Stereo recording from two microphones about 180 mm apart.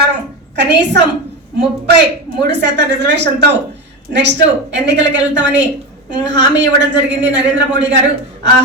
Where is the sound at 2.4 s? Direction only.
70° right (ahead or behind).